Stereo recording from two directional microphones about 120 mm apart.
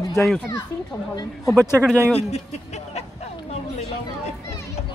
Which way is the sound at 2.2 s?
65° left (ahead or behind).